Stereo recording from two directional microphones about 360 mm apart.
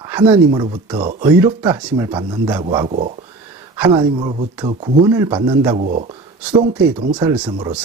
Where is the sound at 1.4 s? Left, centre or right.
Centre.